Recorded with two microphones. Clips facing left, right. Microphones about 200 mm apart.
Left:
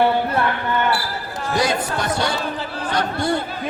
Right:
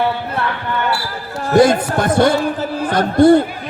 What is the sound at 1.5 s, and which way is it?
A man's voice, 50° right (ahead or behind).